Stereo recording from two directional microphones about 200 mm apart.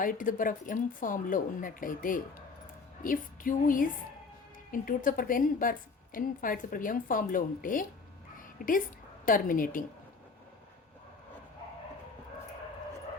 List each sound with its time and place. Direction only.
0.0 s speech: 45° left (ahead or behind)
8.4 s a sound: 45° left (ahead or behind)
9.2 s speech: 45° left (ahead or behind)